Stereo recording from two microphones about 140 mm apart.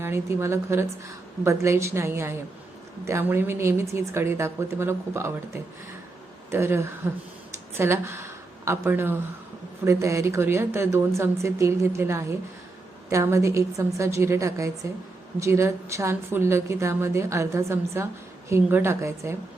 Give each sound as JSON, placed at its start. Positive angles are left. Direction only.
{"t": 0.0, "sound": "a woman's voice", "side_deg": -20}